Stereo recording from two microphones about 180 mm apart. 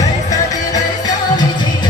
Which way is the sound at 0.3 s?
20° left (ahead or behind).